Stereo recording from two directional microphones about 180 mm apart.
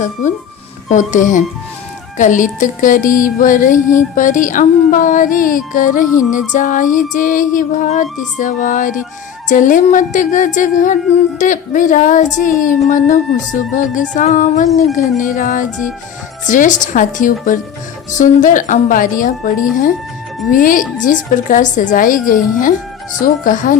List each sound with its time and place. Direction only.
0.0 s music: 45° left (ahead or behind)